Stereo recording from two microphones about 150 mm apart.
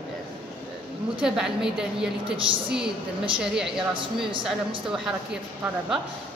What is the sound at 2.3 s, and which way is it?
Speech, 35° right (ahead or behind).